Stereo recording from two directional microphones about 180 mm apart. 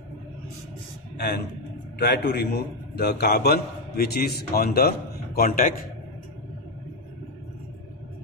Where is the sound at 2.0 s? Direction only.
65° left (ahead or behind); by 5.9 s 50° left (ahead or behind).